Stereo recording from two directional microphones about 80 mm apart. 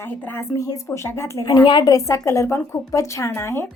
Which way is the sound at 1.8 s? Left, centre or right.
Left.